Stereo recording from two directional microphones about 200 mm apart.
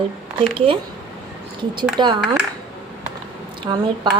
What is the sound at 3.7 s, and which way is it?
Speech, 20° right (ahead or behind).